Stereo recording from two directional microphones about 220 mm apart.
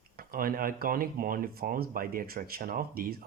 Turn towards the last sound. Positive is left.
turn(degrees=-40)  # may be behind; listen again after turning